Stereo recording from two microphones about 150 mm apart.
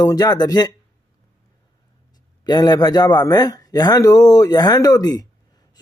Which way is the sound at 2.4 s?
25° left (ahead or behind).